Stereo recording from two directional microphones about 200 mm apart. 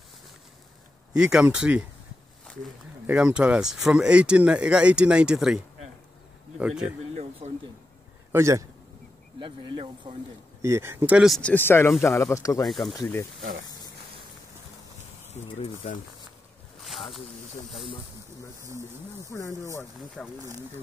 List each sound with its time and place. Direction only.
1.1 s speech: 5° right (ahead or behind)
3.1 s speech: 5° right (ahead or behind)
6.6 s speech: 5° right (ahead or behind)
7.4 s a sound: 35° right (ahead or behind)
8.3 s a man's voice: 15° right (ahead or behind)
10.1 s speech: 25° right (ahead or behind)
10.6 s speech: 15° right (ahead or behind); by 12.6 s 15° left (ahead or behind)
12.6 s speech: centre (ahead or behind)
13.0 s speech: 15° left (ahead or behind)
15.3 s speech: 35° left (ahead or behind)
19.1 s speech: 15° left (ahead or behind)
20.2 s speech: centre (ahead or behind)